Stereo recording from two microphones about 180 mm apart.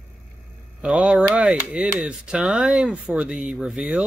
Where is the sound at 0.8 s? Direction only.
5° right (ahead or behind).